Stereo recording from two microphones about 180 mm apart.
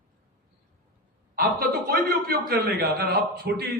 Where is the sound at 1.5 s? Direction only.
55° right (ahead or behind).